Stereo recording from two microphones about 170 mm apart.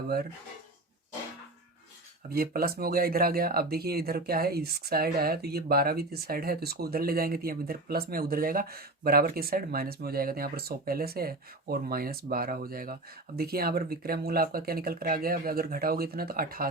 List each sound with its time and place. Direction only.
2.3 s speech: 60° right (ahead or behind)